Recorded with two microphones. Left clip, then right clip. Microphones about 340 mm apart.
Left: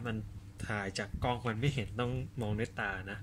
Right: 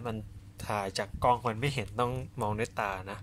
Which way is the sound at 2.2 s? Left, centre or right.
Right.